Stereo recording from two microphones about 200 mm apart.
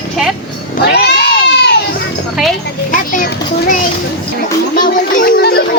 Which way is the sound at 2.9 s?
45° left (ahead or behind).